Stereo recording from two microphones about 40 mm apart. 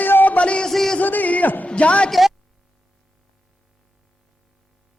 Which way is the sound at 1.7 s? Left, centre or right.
Left.